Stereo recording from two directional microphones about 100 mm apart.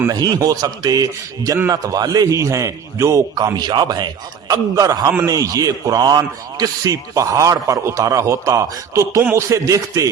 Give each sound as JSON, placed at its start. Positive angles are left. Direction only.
{"t": 0.1, "sound": "a man's voice", "side_deg": -40}